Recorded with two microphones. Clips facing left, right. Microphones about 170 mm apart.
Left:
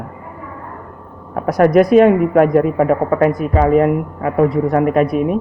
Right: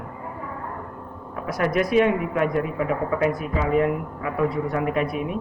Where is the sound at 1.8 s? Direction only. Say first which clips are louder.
Left 10 dB; 50° left (ahead or behind).